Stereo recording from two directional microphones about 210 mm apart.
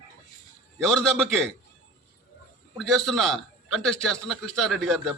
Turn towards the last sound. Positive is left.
turn(degrees=0)  # may be behind; listen again after turning